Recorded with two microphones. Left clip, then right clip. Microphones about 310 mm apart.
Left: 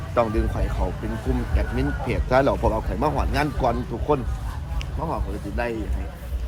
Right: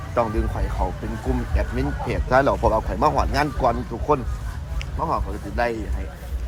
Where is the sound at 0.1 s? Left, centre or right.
Centre.